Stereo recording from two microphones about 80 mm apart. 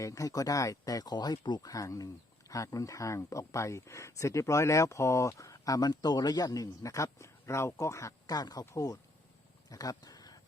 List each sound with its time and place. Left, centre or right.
0.0 s speech: left
1.7 s speech: left
8.4 s speech: left
9.6 s a sound: left